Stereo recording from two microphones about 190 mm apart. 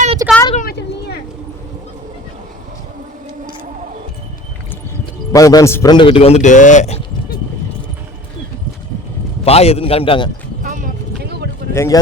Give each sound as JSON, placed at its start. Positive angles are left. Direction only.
{"t": 0.2, "sound": "vehicle", "side_deg": -15}
{"t": 0.5, "sound": "vehicle", "side_deg": 50}
{"t": 5.3, "sound": "a man's voice", "side_deg": 20}
{"t": 9.4, "sound": "a man's voice", "side_deg": 30}
{"t": 10.6, "sound": "a sound", "side_deg": -45}
{"t": 11.2, "sound": "a sound", "side_deg": -60}
{"t": 11.7, "sound": "speech", "side_deg": 15}